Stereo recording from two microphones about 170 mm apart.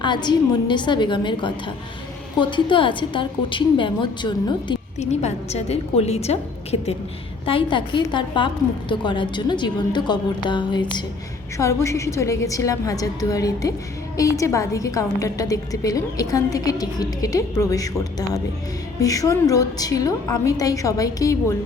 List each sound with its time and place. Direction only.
0.0 s a woman's voice: 25° left (ahead or behind)
4.9 s a woman's voice: 40° left (ahead or behind)
11.5 s a woman's voice: 15° left (ahead or behind)